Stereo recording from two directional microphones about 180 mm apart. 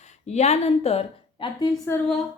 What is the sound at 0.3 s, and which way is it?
Speech, 35° left (ahead or behind).